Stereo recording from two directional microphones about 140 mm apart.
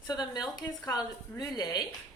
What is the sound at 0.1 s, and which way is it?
A woman's voice, 30° left (ahead or behind).